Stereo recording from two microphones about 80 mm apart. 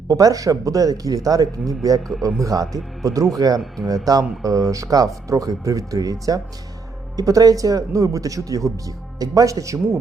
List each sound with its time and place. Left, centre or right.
0.1 s speech: right